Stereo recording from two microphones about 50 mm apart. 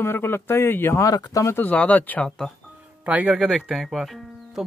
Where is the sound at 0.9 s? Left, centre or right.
Left.